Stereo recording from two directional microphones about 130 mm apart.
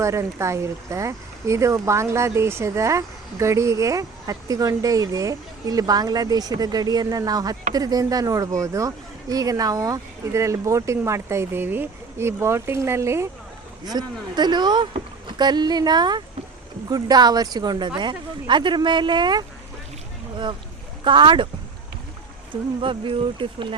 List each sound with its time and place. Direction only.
0.0 s speech: 20° right (ahead or behind)
13.8 s speech: 30° right (ahead or behind)
22.8 s speech: 40° right (ahead or behind)